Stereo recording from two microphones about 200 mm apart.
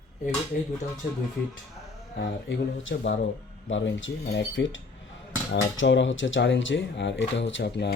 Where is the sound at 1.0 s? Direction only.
50° left (ahead or behind).